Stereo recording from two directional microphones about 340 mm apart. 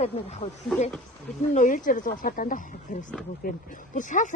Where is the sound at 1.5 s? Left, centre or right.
Left.